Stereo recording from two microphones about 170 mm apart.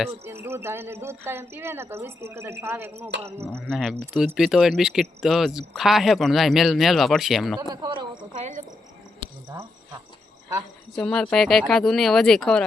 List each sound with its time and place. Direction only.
0.3 s a woman's voice: 15° right (ahead or behind)
3.5 s speech: centre (ahead or behind)
7.7 s speech: 25° right (ahead or behind)
8.4 s cricket: 45° right (ahead or behind)
10.9 s speech: 5° left (ahead or behind)